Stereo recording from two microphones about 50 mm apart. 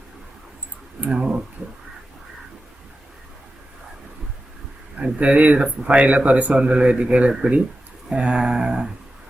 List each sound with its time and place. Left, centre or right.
1.0 s speech: right
4.9 s a man's voice: right
8.1 s a sound: centre